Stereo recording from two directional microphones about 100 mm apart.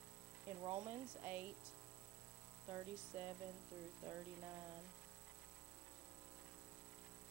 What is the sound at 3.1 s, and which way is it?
Speech, 20° right (ahead or behind).